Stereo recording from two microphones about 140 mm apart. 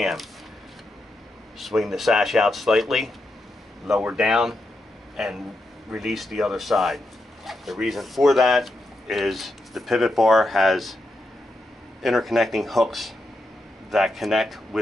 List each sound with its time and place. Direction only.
0.0 s speech: centre (ahead or behind)
1.6 s speech: centre (ahead or behind)
12.0 s speech: centre (ahead or behind)